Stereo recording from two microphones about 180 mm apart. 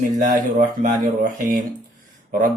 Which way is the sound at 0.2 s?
50° right (ahead or behind).